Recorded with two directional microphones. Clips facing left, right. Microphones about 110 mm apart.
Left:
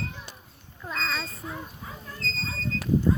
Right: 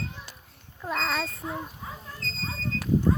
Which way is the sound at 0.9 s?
65° right (ahead or behind).